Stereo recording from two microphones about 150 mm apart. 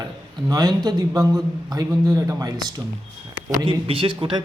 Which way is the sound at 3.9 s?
35° right (ahead or behind).